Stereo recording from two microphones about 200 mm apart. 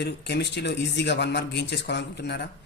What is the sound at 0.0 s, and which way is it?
Speech, 55° left (ahead or behind).